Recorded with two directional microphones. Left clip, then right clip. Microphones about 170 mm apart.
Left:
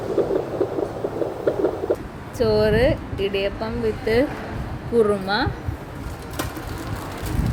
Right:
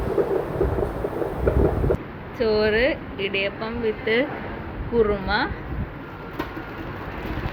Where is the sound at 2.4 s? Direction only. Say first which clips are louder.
Left 2 dB; 55° left (ahead or behind).